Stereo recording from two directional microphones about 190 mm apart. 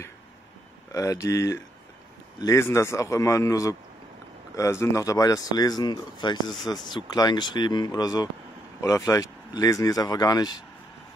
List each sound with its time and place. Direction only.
0.9 s speech: 15° left (ahead or behind)